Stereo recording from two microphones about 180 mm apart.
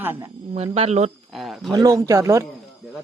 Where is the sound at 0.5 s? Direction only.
35° right (ahead or behind).